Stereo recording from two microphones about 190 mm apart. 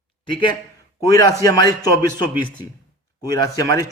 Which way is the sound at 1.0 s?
20° left (ahead or behind).